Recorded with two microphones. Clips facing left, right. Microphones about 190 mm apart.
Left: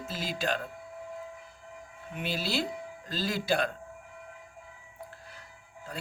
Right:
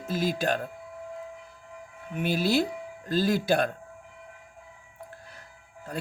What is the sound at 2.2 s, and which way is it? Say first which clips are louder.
Speech: right 7 dB; 50° right (ahead or behind).